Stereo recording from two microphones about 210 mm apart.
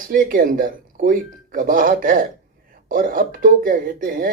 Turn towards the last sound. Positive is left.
turn(degrees=-45)  # may be behind; listen again after turning